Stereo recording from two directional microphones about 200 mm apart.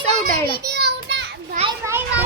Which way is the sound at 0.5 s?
55° right (ahead or behind).